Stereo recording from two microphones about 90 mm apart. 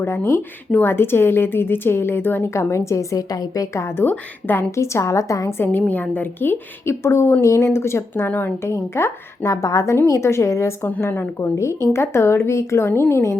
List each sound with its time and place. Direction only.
0.0 s a woman's voice: 25° left (ahead or behind)
3.9 s a woman's voice: 20° left (ahead or behind)
5.5 s a woman's voice: 20° left (ahead or behind)
8.7 s a woman's voice: 30° left (ahead or behind)
10.8 s a woman's voice: 20° left (ahead or behind)
11.3 s a woman's voice: 30° left (ahead or behind)